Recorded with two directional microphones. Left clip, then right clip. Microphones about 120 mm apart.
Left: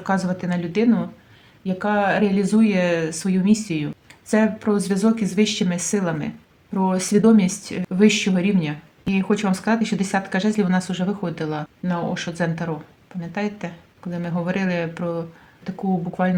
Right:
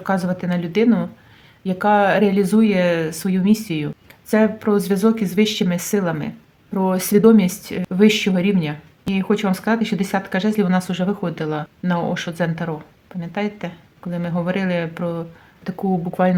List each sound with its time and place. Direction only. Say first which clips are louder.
0.0 s speech: right 2 dB; 30° right (ahead or behind)
11.8 s speech: right 5 dB; 60° right (ahead or behind)
12.1 s speech: right 2 dB; 35° right (ahead or behind)
15.6 s speech: right 3 dB; 50° right (ahead or behind)